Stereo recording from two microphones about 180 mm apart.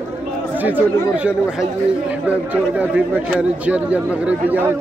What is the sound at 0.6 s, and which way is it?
A man's voice, 10° right (ahead or behind).